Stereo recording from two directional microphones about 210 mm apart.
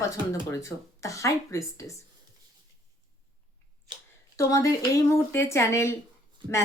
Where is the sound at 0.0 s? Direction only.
15° left (ahead or behind).